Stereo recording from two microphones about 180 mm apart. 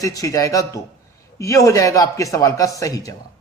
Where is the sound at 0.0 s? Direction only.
20° left (ahead or behind).